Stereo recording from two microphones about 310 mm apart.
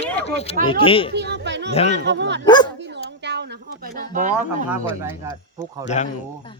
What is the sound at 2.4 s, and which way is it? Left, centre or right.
Dog, centre.